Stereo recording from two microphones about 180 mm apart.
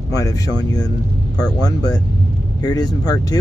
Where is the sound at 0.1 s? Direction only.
20° left (ahead or behind).